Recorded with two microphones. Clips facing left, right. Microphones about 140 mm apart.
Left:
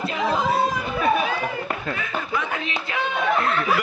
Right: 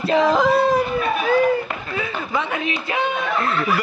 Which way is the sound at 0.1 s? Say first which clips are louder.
Right 9 dB; 90° right.